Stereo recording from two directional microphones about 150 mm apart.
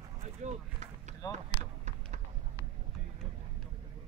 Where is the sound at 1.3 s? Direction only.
50° right (ahead or behind).